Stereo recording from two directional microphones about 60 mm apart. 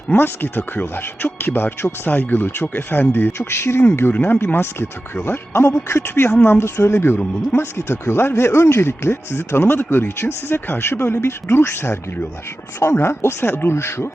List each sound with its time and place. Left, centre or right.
0.1 s speech: left
2.0 s speech: left
3.3 s speech: left
4.4 s speech: left